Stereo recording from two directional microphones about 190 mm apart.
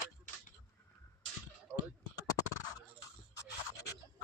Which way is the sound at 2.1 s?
20° left (ahead or behind).